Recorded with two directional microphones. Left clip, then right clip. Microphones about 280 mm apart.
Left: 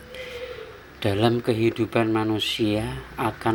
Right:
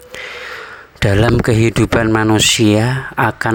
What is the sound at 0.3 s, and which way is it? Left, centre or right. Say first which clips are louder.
Speech: right 8 dB; right.